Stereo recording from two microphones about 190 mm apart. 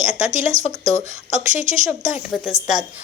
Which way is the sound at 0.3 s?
40° right (ahead or behind).